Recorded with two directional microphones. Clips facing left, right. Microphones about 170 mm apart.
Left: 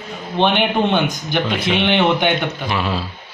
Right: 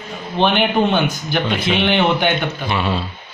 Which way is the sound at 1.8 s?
15° left (ahead or behind).